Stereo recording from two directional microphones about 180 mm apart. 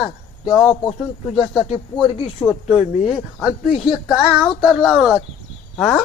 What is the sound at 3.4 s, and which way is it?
A man's voice, centre (ahead or behind).